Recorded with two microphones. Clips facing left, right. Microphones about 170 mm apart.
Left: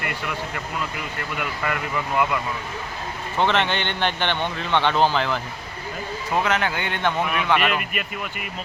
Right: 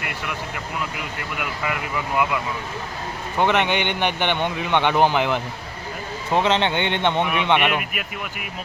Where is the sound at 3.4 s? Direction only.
15° right (ahead or behind).